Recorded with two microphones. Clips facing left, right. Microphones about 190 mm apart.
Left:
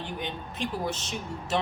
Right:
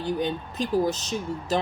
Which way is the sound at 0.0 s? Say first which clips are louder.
Right 8 dB; 40° right (ahead or behind).